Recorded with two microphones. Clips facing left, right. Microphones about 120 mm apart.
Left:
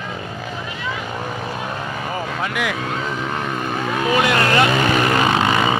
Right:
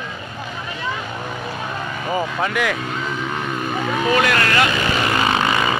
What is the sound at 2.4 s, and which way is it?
Speech, 5° left (ahead or behind).